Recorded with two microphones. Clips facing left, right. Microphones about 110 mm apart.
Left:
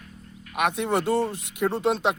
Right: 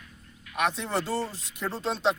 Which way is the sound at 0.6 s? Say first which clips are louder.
Left 4 dB; 55° left (ahead or behind).